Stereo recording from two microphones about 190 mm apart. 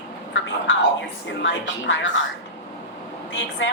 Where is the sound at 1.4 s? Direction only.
75° left (ahead or behind).